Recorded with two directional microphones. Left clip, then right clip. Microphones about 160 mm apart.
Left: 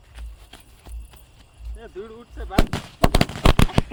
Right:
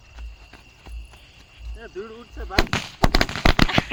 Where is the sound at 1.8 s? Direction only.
55° right (ahead or behind).